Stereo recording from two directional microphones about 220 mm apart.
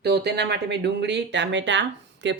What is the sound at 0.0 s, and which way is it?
Speech, 50° right (ahead or behind).